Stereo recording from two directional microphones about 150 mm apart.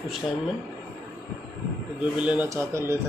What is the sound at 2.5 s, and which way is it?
Speech, 20° right (ahead or behind).